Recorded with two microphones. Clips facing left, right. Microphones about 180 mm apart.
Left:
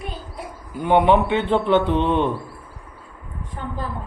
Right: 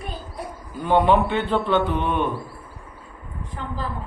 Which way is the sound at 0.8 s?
20° left (ahead or behind).